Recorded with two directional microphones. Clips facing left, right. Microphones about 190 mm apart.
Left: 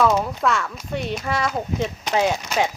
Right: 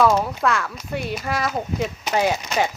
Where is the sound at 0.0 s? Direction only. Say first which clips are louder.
Right 1 dB; centre (ahead or behind).